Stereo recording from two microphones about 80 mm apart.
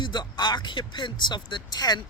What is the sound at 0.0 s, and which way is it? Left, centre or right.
Speech, left.